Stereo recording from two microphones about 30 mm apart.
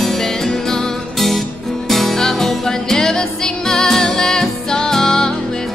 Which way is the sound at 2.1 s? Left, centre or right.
Centre.